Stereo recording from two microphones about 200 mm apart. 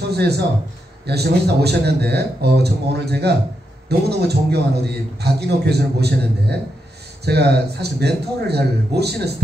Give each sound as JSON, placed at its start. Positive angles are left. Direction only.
{"t": 0.1, "sound": "a man's voice", "side_deg": -55}
{"t": 7.2, "sound": "a man's voice", "side_deg": -55}